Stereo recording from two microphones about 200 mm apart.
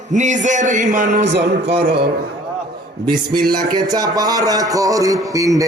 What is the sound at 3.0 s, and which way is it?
A man's voice, 20° right (ahead or behind).